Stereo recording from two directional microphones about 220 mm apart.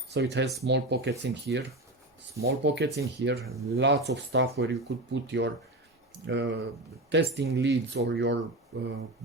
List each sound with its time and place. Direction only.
0.1 s speech: 50° right (ahead or behind)